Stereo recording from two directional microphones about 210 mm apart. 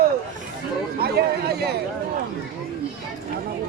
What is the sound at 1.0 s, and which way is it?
Speech, 50° right (ahead or behind).